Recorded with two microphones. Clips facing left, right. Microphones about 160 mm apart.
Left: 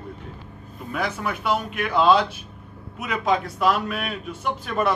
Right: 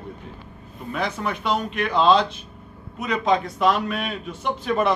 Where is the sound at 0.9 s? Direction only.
5° left (ahead or behind).